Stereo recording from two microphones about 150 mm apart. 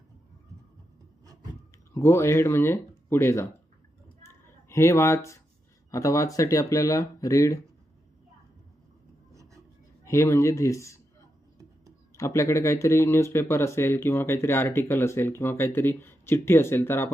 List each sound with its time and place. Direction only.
1.9 s speech: 20° left (ahead or behind)
4.7 s speech: 20° left (ahead or behind)
9.3 s a sound: 20° right (ahead or behind)
10.0 s speech: 20° left (ahead or behind)
12.1 s speech: 20° left (ahead or behind)